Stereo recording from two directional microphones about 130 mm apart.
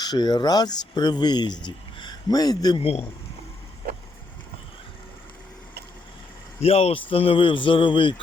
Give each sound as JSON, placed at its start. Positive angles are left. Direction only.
{"t": 0.0, "sound": "speech", "side_deg": 30}
{"t": 2.8, "sound": "speech", "side_deg": 55}
{"t": 6.6, "sound": "speech", "side_deg": 50}